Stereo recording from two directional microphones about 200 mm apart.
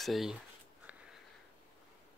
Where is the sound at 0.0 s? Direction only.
Centre (ahead or behind).